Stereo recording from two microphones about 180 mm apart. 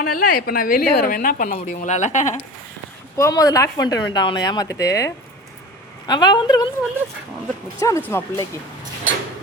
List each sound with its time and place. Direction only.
0.0 s a woman's voice: 50° left (ahead or behind)
3.2 s speech: 20° left (ahead or behind)
7.8 s speech: 15° left (ahead or behind)